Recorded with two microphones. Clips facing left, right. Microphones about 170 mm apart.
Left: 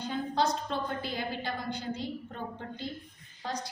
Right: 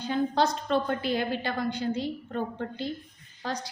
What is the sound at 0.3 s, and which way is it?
A woman's voice, 75° right (ahead or behind).